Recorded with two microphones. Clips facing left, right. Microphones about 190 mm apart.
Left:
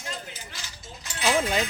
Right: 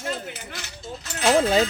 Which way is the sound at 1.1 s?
45° right (ahead or behind).